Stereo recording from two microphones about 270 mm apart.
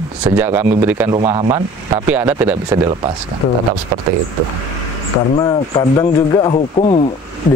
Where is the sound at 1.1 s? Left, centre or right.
Centre.